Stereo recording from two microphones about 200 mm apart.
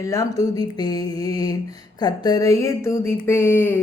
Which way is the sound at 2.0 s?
20° left (ahead or behind).